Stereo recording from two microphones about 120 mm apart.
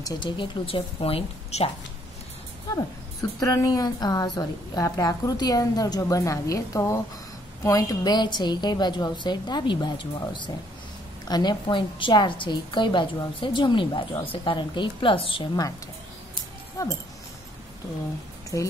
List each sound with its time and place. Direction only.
0.2 s a woman's voice: 45° left (ahead or behind)
3.3 s a woman's voice: 30° left (ahead or behind); by 15.4 s 45° left (ahead or behind)
16.8 s speech: 30° left (ahead or behind)